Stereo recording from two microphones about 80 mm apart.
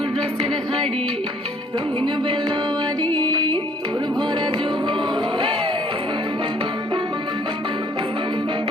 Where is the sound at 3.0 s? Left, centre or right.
Centre.